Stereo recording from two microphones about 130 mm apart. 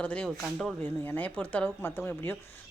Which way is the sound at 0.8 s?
15° left (ahead or behind).